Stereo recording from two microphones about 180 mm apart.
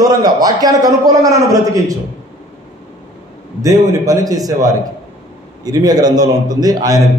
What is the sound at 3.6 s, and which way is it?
A man's voice, 20° right (ahead or behind).